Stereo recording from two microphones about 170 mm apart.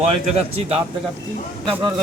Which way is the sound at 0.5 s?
35° right (ahead or behind).